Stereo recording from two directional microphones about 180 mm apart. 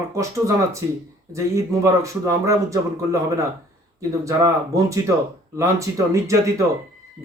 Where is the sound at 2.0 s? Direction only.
15° right (ahead or behind).